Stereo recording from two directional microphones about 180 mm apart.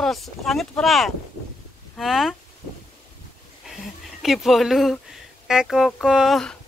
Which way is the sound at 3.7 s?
Centre (ahead or behind).